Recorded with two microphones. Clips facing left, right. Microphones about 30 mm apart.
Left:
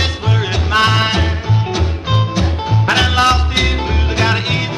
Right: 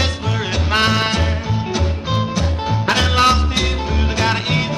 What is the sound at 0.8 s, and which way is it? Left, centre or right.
Music, centre.